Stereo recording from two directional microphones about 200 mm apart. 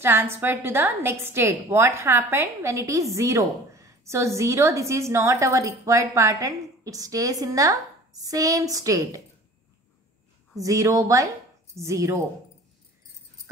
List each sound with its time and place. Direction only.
0.0 s a woman's voice: 10° right (ahead or behind)
10.6 s a woman's voice: 15° right (ahead or behind)